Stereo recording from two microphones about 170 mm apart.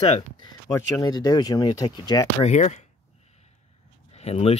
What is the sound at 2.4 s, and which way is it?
Speech, 40° left (ahead or behind).